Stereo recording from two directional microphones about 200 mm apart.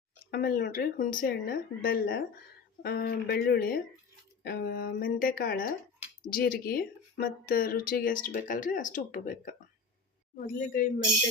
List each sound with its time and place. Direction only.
0.3 s speech: 50° left (ahead or behind)